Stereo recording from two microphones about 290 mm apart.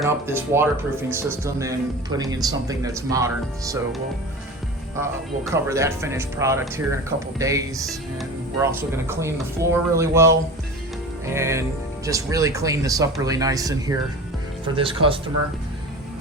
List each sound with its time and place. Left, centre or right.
0.0 s speech: centre
5.5 s speech: centre